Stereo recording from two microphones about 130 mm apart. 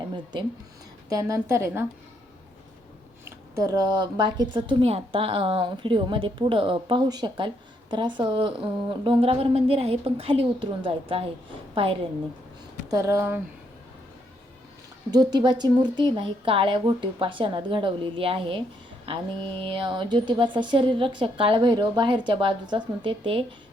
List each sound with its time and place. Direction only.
1.1 s a woman's voice: 25° right (ahead or behind)
3.2 s a woman's voice: 25° right (ahead or behind); by 11.9 s 45° right (ahead or behind)
12.9 s a woman's voice: 20° right (ahead or behind)
15.1 s a woman's voice: 30° right (ahead or behind)